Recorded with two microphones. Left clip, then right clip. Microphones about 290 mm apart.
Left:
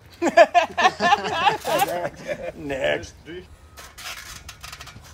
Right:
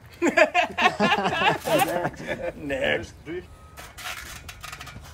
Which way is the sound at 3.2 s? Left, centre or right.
Centre.